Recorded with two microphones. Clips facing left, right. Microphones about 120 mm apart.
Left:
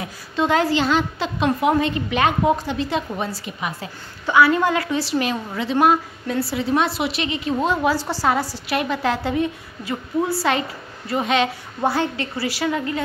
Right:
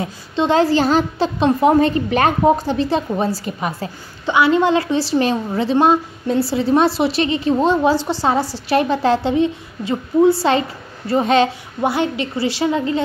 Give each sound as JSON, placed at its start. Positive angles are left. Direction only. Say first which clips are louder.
{"t": 0.0, "sound": "a woman's voice", "louder": "right 3 dB", "side_deg": -30}
{"t": 4.3, "sound": "a woman's voice", "louder": "right 2 dB", "side_deg": -25}
{"t": 11.8, "sound": "a woman's voice", "louder": "right 3 dB", "side_deg": -20}